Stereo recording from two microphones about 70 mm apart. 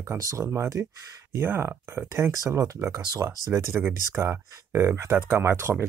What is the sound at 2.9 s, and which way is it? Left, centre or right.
Speech, right.